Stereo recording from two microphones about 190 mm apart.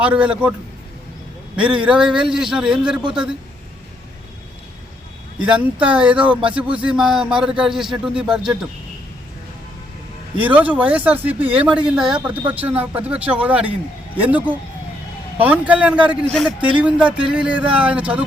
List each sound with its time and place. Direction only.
0.0 s speech: 5° right (ahead or behind)
1.5 s a man's voice: 5° right (ahead or behind)
5.8 s a man's voice: 5° right (ahead or behind)
10.3 s speech: 10° right (ahead or behind)